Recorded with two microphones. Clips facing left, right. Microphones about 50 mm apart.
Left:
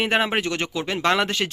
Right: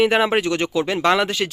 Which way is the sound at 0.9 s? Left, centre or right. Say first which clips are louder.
Right 2 dB; centre.